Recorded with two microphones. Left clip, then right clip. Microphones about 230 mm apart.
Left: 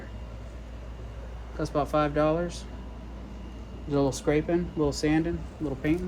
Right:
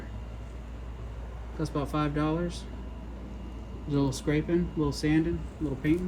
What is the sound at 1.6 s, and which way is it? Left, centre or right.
Speech, centre.